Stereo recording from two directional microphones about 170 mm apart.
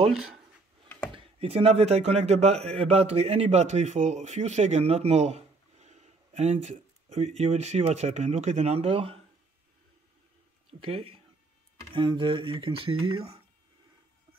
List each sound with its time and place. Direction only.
1.1 s a man's voice: 35° right (ahead or behind)
10.7 s a man's voice: 35° right (ahead or behind)